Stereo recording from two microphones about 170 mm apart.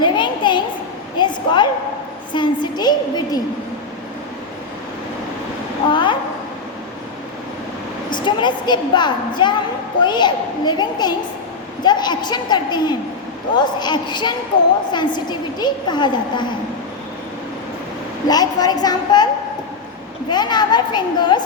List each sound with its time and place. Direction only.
0.0 s a sound: 25° left (ahead or behind)
2.3 s a woman's voice: 25° left (ahead or behind)
5.9 s a sound: 30° left (ahead or behind)
8.1 s a woman's voice: 25° left (ahead or behind)
18.3 s a woman's voice: 25° left (ahead or behind)
20.3 s a woman's voice: 25° left (ahead or behind)